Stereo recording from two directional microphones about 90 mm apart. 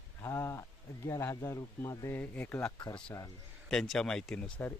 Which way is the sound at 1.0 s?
35° left (ahead or behind).